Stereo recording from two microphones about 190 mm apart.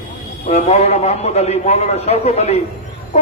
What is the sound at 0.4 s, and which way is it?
A woman's voice, 35° left (ahead or behind).